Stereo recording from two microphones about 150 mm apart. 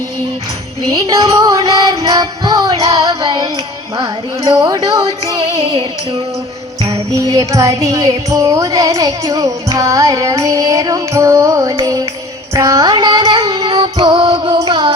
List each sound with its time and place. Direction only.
0.9 s music: 25° right (ahead or behind)
7.1 s music: 25° right (ahead or behind)